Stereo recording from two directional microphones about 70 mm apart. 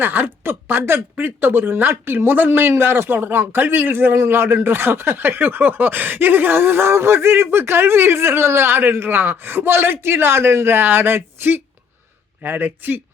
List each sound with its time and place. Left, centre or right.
0.0 s speech: right